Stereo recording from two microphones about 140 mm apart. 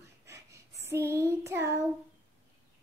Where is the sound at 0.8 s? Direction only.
20° right (ahead or behind).